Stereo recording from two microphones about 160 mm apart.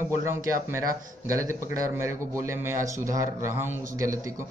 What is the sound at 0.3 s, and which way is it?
A man's voice, 15° right (ahead or behind).